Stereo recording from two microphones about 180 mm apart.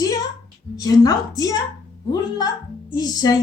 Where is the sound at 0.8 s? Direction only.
20° left (ahead or behind).